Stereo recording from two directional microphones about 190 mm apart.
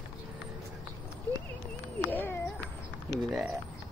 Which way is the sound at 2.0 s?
10° left (ahead or behind).